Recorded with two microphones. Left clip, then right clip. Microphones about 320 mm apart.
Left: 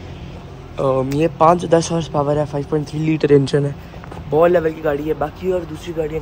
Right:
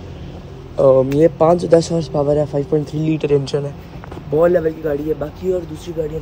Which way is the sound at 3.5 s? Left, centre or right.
Left.